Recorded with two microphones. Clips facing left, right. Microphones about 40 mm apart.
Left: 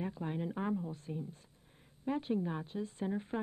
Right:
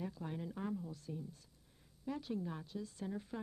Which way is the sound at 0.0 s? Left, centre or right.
Left.